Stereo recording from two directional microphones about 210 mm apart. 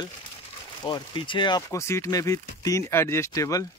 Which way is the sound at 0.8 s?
25° left (ahead or behind).